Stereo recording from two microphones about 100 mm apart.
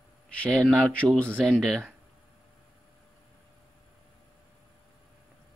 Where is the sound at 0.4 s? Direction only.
10° left (ahead or behind).